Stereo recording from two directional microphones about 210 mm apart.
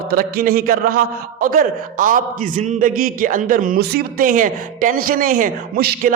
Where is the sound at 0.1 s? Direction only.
45° right (ahead or behind).